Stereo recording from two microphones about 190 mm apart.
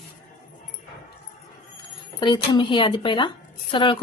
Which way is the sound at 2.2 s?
25° left (ahead or behind).